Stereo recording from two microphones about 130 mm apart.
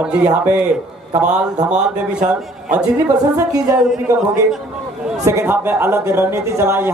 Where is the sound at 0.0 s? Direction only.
10° right (ahead or behind).